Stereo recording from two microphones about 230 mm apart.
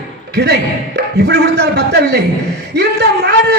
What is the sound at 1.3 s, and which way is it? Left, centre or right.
A man's voice, right.